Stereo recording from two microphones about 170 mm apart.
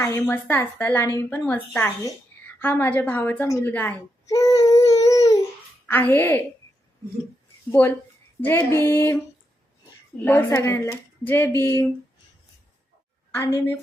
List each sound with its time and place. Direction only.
0.0 s a woman's voice: 15° left (ahead or behind)
4.3 s child singing: 20° left (ahead or behind)
5.8 s a woman's voice: 10° left (ahead or behind)
7.7 s a woman's voice: 15° left (ahead or behind)
10.2 s a woman's voice: 15° left (ahead or behind)
13.3 s a woman's voice: 15° left (ahead or behind)